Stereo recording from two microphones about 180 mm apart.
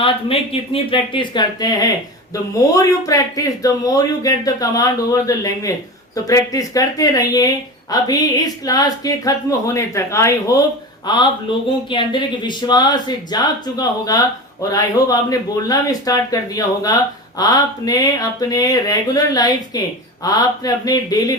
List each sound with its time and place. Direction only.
0.0 s speech: 30° left (ahead or behind)